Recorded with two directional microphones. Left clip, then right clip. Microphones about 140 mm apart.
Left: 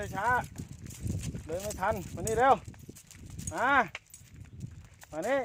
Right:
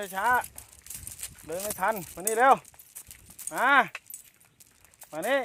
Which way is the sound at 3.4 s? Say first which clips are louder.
Right 4 dB; 25° right (ahead or behind).